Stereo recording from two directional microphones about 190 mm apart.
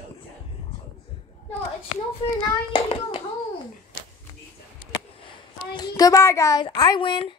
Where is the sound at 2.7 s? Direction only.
25° left (ahead or behind).